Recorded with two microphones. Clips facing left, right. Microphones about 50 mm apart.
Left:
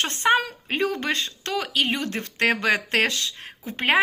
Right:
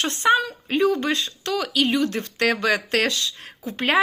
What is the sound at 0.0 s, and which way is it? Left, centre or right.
Speech, left.